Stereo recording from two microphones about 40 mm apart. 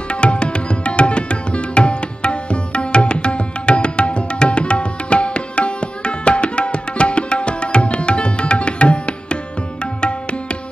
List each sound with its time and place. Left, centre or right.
0.1 s tabla: left
9.9 s music: left